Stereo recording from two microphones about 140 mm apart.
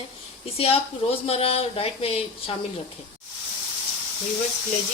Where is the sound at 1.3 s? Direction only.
45° left (ahead or behind).